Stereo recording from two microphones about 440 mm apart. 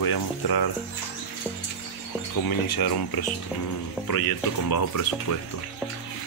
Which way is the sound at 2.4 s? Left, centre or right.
Left.